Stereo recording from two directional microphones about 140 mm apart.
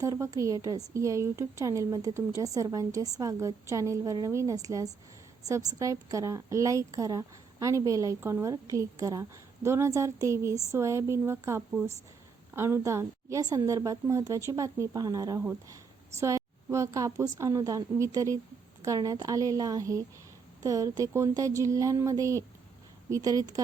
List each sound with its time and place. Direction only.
0.0 s a woman's voice: 20° right (ahead or behind)